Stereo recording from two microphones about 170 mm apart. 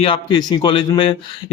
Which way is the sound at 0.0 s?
30° left (ahead or behind).